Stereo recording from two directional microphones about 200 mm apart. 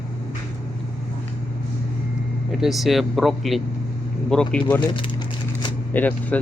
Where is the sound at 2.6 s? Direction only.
Centre (ahead or behind).